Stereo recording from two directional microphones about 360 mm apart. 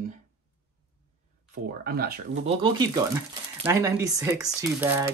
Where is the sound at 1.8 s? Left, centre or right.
Right.